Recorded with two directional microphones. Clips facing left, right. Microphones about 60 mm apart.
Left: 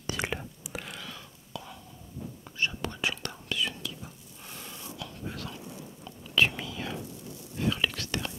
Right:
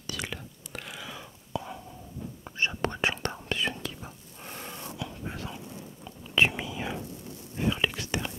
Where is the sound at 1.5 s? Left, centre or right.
Right.